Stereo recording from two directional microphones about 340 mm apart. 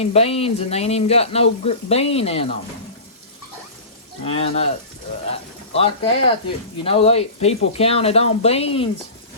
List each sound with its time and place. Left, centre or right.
0.0 s speech: centre
4.3 s speech: centre
5.7 s speech: centre